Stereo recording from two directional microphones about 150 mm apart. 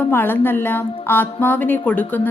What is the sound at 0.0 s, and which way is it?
A woman's voice, 15° left (ahead or behind).